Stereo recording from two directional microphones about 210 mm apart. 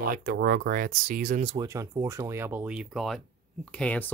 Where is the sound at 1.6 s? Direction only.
15° right (ahead or behind).